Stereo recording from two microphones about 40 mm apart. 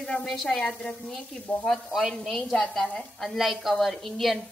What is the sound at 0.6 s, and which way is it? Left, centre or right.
Speech, left.